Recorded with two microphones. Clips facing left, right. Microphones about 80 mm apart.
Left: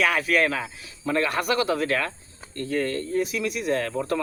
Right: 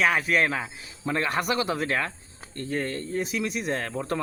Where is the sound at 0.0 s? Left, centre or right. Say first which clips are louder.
Left 1 dB; right.